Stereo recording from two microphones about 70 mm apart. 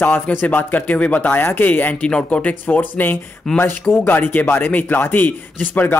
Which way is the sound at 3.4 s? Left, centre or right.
Centre.